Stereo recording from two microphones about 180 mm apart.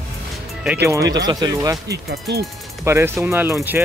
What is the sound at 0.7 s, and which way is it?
Speech, 15° right (ahead or behind).